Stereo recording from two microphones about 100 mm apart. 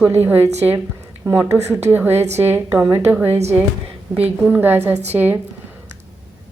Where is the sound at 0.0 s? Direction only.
20° right (ahead or behind).